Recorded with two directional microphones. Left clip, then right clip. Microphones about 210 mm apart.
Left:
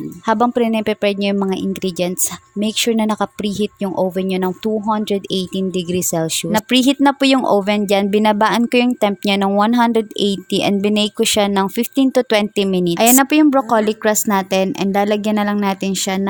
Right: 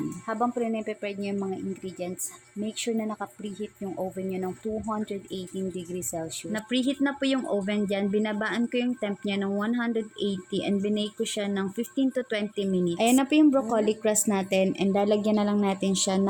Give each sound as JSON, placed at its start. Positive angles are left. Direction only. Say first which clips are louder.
{"t": 0.3, "sound": "speech", "louder": "left 13 dB", "side_deg": 45}